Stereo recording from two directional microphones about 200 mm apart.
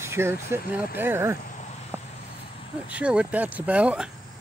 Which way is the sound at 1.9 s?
10° right (ahead or behind).